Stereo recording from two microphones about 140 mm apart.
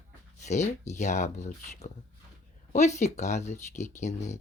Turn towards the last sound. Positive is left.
turn(degrees=55)  # may be behind; listen again after turning